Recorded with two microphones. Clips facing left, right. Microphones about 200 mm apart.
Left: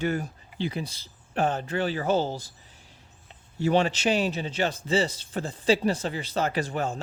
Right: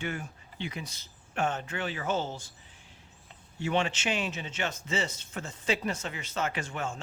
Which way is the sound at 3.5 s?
40° left (ahead or behind).